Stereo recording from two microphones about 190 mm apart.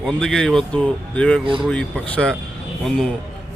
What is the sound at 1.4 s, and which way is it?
Speech, 25° right (ahead or behind).